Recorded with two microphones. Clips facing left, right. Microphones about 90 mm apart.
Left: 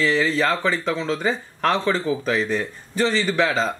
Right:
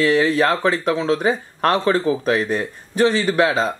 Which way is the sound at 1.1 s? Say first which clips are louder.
Right 5 dB; 10° right (ahead or behind).